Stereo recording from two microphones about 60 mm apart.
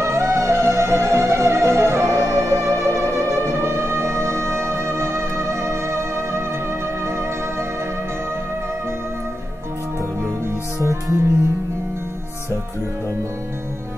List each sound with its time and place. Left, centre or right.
0.0 s music: right
10.8 s music: right